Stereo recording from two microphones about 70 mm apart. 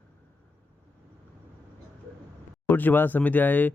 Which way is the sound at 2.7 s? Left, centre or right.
Left.